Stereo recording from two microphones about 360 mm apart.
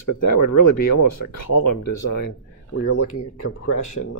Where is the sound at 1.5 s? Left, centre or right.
Left.